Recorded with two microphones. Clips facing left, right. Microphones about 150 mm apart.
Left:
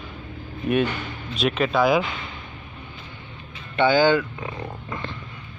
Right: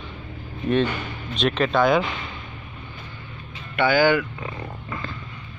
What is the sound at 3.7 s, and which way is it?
Speech, 25° left (ahead or behind).